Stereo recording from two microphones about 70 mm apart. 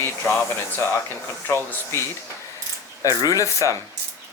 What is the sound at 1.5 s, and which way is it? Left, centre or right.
Speech, left.